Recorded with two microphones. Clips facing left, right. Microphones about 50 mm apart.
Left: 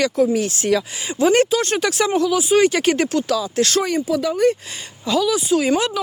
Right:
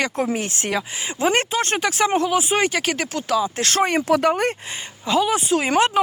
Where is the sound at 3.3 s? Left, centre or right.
Right.